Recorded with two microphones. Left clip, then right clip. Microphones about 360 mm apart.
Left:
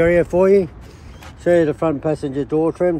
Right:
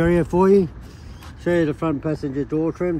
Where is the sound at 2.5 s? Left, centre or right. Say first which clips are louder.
Left 5 dB; left.